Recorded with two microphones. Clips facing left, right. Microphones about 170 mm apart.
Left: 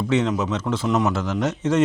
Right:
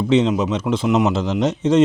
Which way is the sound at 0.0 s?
20° right (ahead or behind).